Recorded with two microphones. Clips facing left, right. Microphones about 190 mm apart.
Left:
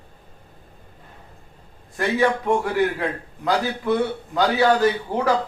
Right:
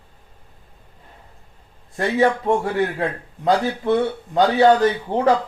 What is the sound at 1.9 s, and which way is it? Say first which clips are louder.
A man's voice: right 2 dB; 25° right (ahead or behind).